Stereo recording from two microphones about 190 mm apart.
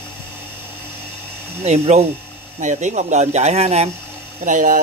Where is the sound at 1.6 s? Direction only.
35° right (ahead or behind).